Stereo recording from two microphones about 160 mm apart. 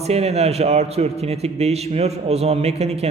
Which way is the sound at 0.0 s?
40° right (ahead or behind).